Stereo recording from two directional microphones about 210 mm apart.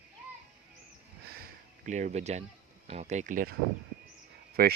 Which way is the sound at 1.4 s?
35° right (ahead or behind).